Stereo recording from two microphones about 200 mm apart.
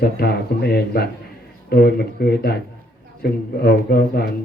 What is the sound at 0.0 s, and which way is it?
Speech, 50° left (ahead or behind).